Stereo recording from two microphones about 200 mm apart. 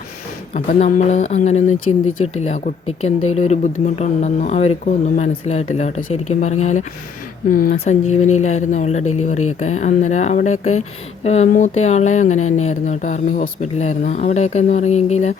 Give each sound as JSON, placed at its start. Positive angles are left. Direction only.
{"t": 0.5, "sound": "speech", "side_deg": 40}
{"t": 7.5, "sound": "speech", "side_deg": 45}
{"t": 8.0, "sound": "speech", "side_deg": 35}